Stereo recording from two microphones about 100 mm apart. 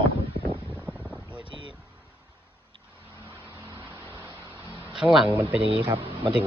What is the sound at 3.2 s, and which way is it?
Vehicle, 25° left (ahead or behind).